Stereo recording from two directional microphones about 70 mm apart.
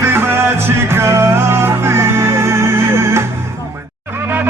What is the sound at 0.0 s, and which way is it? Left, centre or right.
Music, right.